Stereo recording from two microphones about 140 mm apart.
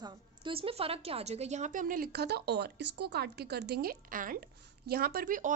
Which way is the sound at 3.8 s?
85° right.